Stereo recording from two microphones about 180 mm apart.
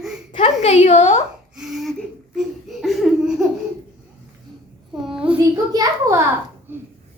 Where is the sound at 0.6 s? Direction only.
40° left (ahead or behind).